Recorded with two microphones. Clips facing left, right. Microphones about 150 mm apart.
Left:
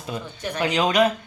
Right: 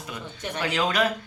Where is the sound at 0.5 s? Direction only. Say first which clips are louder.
Left 5 dB; 20° left (ahead or behind).